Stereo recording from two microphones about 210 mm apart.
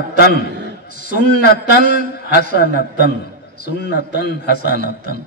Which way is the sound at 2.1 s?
45° left (ahead or behind).